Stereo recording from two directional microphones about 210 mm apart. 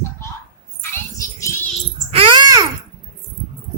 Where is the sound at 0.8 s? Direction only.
15° left (ahead or behind).